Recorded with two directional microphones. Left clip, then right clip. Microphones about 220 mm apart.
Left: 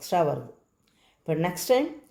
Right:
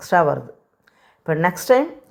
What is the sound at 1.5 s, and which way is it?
Speech, 20° right (ahead or behind).